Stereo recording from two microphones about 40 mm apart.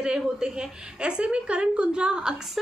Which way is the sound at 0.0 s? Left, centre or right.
Centre.